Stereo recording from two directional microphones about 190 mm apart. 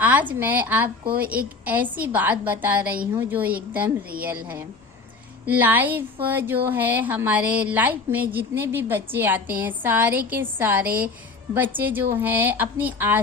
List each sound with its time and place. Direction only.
0.0 s a woman's voice: 10° right (ahead or behind)